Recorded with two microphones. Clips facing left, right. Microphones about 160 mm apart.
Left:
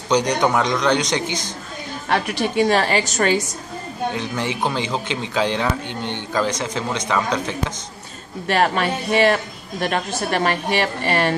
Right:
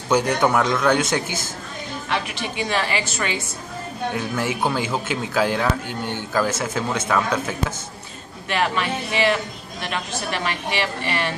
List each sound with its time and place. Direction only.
0.1 s a man's voice: 5° right (ahead or behind)
2.0 s a woman's voice: 45° left (ahead or behind)
4.1 s a man's voice: 5° right (ahead or behind)
8.5 s a woman's voice: 45° left (ahead or behind)